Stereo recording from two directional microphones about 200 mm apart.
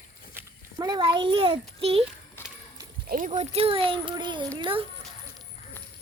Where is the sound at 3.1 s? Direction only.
40° right (ahead or behind).